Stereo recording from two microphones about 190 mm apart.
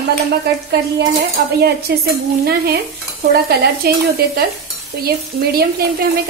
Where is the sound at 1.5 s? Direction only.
55° right (ahead or behind).